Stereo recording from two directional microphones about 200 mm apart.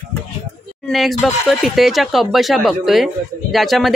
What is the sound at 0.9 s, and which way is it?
Speech, centre (ahead or behind).